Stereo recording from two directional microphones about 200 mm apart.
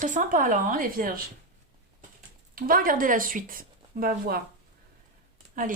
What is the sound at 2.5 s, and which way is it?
Speech, 45° right (ahead or behind).